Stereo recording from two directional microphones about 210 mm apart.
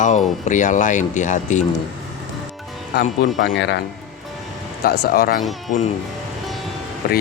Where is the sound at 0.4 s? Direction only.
35° left (ahead or behind).